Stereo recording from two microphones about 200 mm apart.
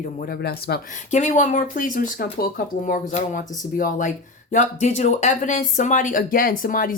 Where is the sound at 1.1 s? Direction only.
40° left (ahead or behind).